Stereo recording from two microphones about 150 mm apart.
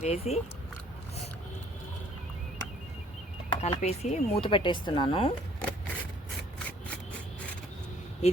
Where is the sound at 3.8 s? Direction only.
45° left (ahead or behind).